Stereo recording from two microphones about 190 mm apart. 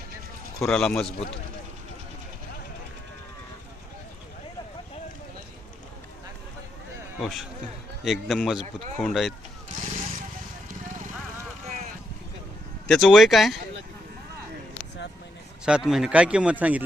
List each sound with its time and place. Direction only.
0.7 s speech: 5° left (ahead or behind)
7.2 s speech: centre (ahead or behind)
9.6 s vehicle: 40° right (ahead or behind)
12.9 s speech: centre (ahead or behind)
15.6 s speech: 5° right (ahead or behind)